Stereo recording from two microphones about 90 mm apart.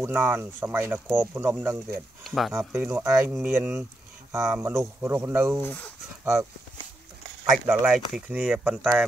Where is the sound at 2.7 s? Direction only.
15° right (ahead or behind).